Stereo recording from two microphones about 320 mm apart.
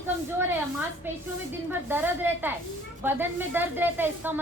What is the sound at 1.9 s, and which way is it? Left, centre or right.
A woman's voice, centre.